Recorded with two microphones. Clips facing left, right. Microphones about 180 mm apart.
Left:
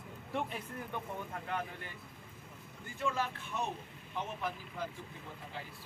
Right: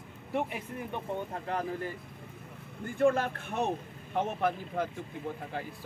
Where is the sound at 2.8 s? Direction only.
55° right (ahead or behind).